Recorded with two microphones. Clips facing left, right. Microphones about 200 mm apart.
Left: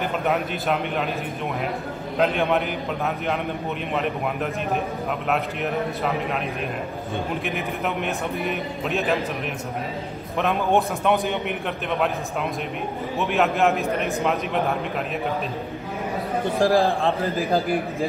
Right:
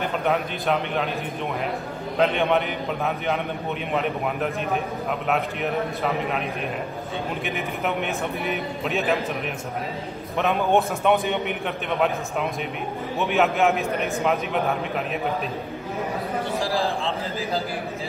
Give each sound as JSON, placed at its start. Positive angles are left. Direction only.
{"t": 0.3, "sound": "a man's voice", "side_deg": 0}
{"t": 2.1, "sound": "a man's voice", "side_deg": 0}
{"t": 3.9, "sound": "a man's voice", "side_deg": 0}
{"t": 7.4, "sound": "a man's voice", "side_deg": 0}
{"t": 10.3, "sound": "a man's voice", "side_deg": 0}
{"t": 13.2, "sound": "a man's voice", "side_deg": 0}
{"t": 16.5, "sound": "a man's voice", "side_deg": 55}